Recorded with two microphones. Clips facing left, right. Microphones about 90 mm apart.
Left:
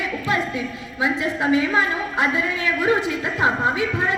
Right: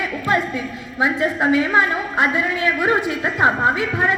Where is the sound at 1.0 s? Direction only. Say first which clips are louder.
Right 3 dB; 50° right (ahead or behind).